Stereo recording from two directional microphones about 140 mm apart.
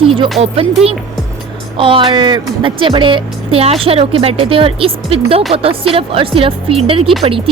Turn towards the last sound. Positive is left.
turn(degrees=-40)  # may be behind; listen again after turning